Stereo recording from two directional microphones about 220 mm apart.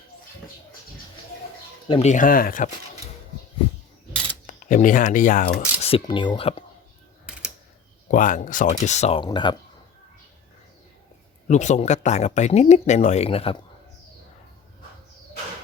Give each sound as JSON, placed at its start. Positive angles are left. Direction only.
{"t": 1.9, "sound": "speech", "side_deg": 30}
{"t": 4.4, "sound": "speech", "side_deg": 35}
{"t": 5.9, "sound": "speech", "side_deg": 20}
{"t": 8.0, "sound": "speech", "side_deg": 35}
{"t": 11.4, "sound": "speech", "side_deg": 30}